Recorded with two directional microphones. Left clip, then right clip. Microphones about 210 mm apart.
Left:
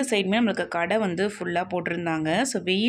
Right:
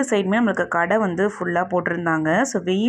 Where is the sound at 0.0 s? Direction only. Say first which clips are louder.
Right 4 dB; 15° right (ahead or behind).